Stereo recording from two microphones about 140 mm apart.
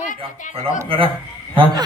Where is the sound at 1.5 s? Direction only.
35° right (ahead or behind).